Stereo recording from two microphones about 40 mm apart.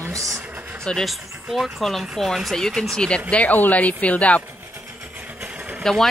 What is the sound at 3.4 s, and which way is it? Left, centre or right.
Speech, left.